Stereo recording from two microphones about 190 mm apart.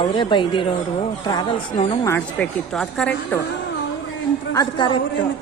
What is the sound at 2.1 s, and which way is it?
Speech, 5° left (ahead or behind).